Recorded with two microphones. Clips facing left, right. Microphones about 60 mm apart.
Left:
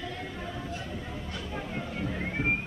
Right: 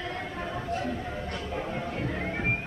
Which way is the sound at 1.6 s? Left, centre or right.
Right.